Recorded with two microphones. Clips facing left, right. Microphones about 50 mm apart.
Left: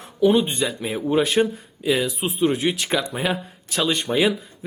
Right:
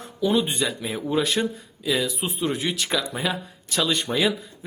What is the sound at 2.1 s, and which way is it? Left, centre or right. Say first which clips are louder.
Speech: left 5 dB; centre.